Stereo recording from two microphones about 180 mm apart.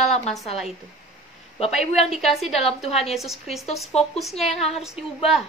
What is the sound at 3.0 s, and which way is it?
Speech, centre (ahead or behind).